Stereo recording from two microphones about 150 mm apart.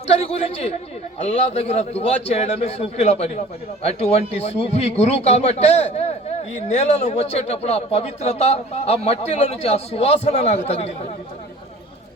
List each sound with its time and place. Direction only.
0.1 s speech: 45° left (ahead or behind)